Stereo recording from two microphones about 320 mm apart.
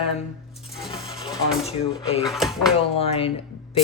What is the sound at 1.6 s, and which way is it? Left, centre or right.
Speech, centre.